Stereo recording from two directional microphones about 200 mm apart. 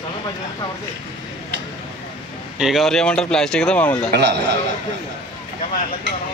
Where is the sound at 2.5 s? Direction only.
Centre (ahead or behind).